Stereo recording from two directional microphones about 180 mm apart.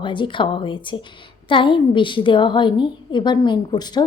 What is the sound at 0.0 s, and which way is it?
A woman's voice, 25° left (ahead or behind).